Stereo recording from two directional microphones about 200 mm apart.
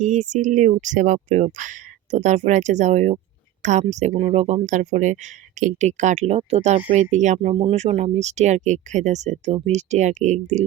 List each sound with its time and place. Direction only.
0.0 s speech: 35° right (ahead or behind)